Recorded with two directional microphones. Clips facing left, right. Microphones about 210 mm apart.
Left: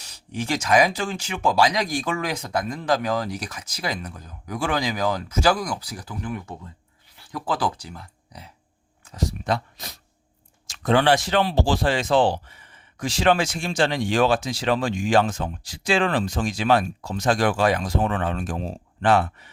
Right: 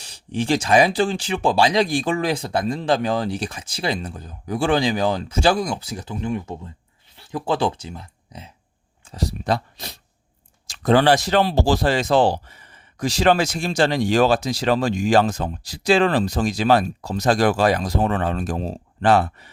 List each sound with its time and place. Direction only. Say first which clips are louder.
0.0 s speech: right 5 dB; 30° right (ahead or behind)
9.0 s speech: right 2 dB; 35° right (ahead or behind)